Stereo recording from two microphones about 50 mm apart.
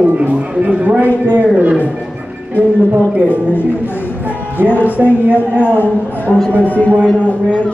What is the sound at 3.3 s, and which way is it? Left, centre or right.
Speech, left.